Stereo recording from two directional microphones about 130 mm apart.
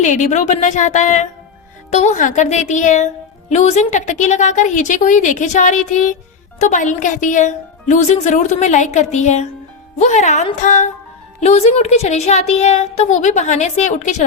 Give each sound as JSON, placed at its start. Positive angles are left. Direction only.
{"t": 0.0, "sound": "a woman's voice", "side_deg": 70}
{"t": 3.5, "sound": "a woman's voice", "side_deg": 60}
{"t": 11.3, "sound": "speech", "side_deg": 55}